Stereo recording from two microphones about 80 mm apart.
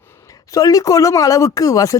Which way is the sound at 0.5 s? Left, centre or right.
Left.